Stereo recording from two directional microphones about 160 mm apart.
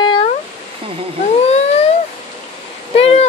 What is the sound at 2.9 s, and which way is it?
Speech, 40° left (ahead or behind).